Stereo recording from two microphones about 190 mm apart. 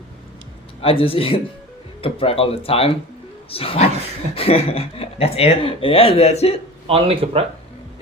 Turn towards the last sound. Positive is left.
turn(degrees=-30)  # may be behind; listen again after turning